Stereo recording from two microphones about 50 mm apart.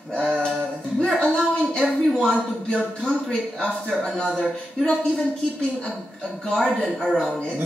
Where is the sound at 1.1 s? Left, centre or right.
Centre.